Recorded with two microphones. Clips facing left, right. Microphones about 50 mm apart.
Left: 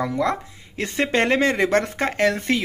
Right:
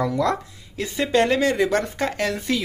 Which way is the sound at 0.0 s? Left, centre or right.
Left.